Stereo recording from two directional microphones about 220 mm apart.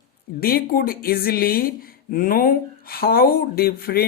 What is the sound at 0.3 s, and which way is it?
Speech, 45° left (ahead or behind).